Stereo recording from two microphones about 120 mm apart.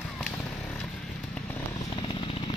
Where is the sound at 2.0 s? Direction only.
50° left (ahead or behind).